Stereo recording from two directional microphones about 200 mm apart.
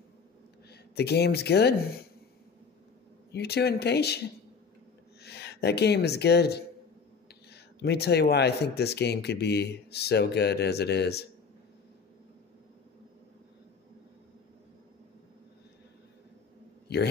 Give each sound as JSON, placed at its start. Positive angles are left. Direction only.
{"t": 0.7, "sound": "speech", "side_deg": 55}
{"t": 3.3, "sound": "speech", "side_deg": 55}
{"t": 5.2, "sound": "speech", "side_deg": 55}
{"t": 16.8, "sound": "a sound", "side_deg": 55}